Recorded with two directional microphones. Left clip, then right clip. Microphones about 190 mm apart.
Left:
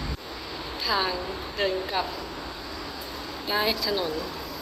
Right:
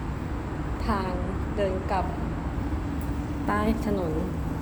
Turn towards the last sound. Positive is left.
turn(degrees=-10)  # may be behind; listen again after turning